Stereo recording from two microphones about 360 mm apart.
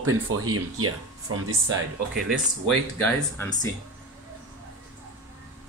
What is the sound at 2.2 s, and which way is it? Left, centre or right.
Speech, centre.